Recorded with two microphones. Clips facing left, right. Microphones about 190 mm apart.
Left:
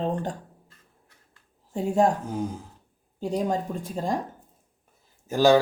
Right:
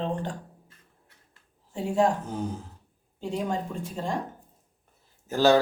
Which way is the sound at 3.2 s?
40° left (ahead or behind).